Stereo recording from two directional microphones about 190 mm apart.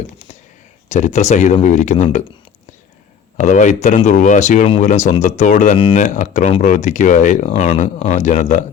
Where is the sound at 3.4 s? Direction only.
40° left (ahead or behind).